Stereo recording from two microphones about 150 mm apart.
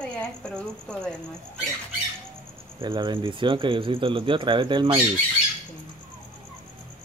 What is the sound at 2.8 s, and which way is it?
Speech, 30° right (ahead or behind).